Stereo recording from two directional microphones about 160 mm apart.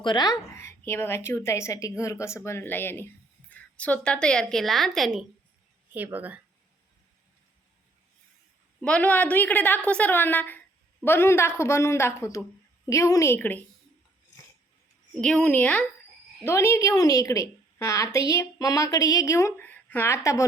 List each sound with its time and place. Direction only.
0.0 s a woman's voice: 25° left (ahead or behind); by 5.2 s centre (ahead or behind)
5.9 s speech: 10° right (ahead or behind)
8.8 s a woman's voice: 10° left (ahead or behind)
15.2 s a woman's voice: 5° left (ahead or behind)